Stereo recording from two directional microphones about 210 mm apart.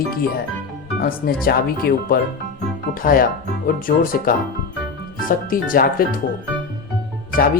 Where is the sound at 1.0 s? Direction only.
45° left (ahead or behind).